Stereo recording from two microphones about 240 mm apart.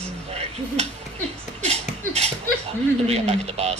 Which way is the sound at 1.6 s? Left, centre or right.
Right.